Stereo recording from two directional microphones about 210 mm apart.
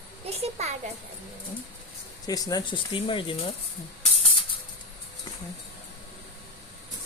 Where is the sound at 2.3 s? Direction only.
15° left (ahead or behind).